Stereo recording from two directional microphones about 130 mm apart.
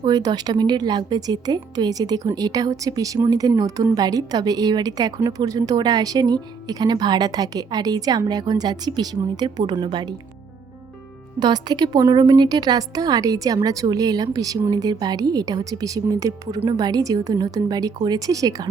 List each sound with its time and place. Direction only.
0.0 s a woman's voice: 30° right (ahead or behind)
11.3 s a woman's voice: 35° right (ahead or behind)